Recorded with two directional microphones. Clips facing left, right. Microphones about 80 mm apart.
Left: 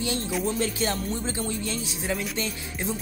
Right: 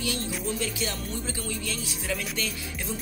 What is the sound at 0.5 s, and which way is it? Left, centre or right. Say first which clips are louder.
Speech: left 5 dB; left.